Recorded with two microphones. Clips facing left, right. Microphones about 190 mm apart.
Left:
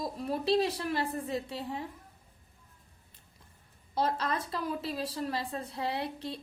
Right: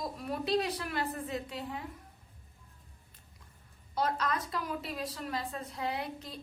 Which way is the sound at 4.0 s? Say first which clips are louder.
Left 1 dB; 30° left (ahead or behind).